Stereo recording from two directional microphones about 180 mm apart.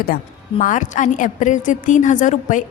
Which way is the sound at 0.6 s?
45° left (ahead or behind).